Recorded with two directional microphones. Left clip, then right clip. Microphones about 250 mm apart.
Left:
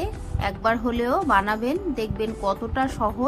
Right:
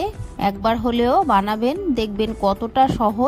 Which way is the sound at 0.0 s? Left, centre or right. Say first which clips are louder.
Right 6 dB; right.